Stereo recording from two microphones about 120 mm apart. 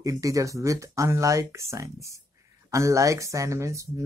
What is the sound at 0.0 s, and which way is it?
Speech, 30° right (ahead or behind).